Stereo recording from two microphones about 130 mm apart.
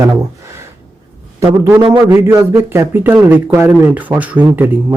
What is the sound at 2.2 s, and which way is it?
A man's voice, 20° right (ahead or behind).